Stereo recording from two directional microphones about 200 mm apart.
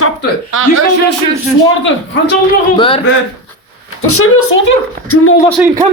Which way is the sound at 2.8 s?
25° left (ahead or behind).